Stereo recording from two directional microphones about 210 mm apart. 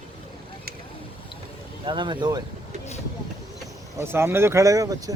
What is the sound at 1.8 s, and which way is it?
Speech, 25° right (ahead or behind).